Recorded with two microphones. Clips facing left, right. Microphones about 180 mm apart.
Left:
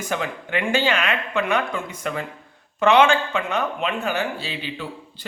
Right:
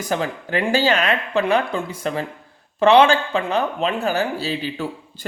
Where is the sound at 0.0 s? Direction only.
35° right (ahead or behind).